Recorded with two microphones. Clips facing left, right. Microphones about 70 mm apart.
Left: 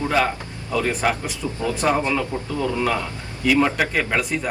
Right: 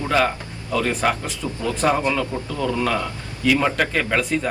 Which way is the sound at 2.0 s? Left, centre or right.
Left.